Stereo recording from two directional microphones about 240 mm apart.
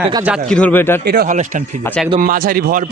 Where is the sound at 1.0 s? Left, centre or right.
Right.